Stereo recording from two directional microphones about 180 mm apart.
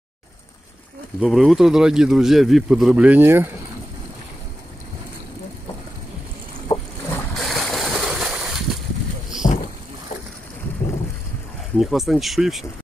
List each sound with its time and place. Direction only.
1.2 s speech: centre (ahead or behind)
6.7 s boat: 15° left (ahead or behind)
7.3 s boat: centre (ahead or behind)
8.0 s a sound: 5° right (ahead or behind)
9.4 s boat: 45° left (ahead or behind)
11.8 s speech: centre (ahead or behind)